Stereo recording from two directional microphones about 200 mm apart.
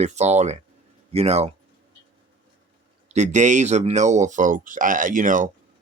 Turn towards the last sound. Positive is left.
turn(degrees=-40)  # may be behind; listen again after turning